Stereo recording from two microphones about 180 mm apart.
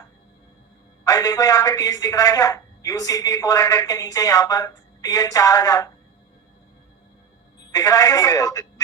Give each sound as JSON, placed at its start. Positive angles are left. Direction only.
{"t": 1.0, "sound": "speech", "side_deg": 20}
{"t": 7.7, "sound": "speech", "side_deg": 20}